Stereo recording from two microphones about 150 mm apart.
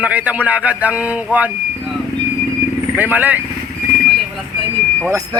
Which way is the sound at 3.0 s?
10° right (ahead or behind).